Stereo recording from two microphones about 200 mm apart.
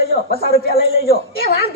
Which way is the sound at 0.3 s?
50° left (ahead or behind).